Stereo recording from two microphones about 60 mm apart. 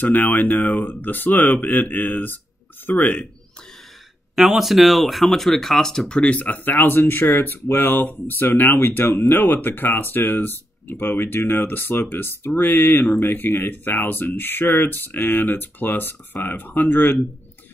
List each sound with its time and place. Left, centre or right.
0.0 s speech: left
4.4 s speech: centre; by 17.2 s left